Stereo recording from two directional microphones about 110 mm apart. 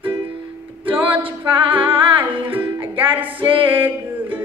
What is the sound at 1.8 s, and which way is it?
Humming, 50° right (ahead or behind).